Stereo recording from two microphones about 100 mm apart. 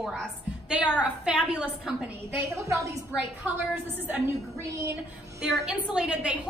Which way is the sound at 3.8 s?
20° right (ahead or behind).